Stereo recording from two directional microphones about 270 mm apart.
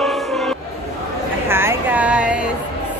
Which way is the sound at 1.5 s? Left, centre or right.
Centre.